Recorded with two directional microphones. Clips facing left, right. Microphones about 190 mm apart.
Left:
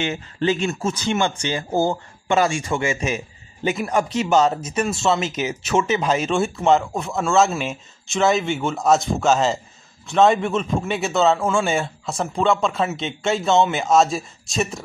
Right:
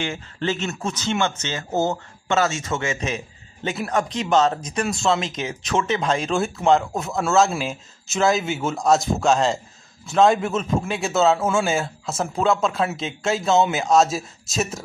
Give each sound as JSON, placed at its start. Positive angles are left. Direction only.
{"t": 0.0, "sound": "a man's voice", "side_deg": 20}